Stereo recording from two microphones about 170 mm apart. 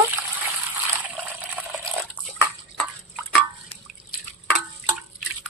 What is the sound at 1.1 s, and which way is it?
Water, 10° right (ahead or behind).